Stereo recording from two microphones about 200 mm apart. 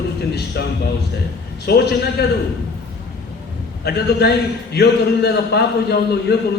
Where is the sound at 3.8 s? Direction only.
55° left (ahead or behind).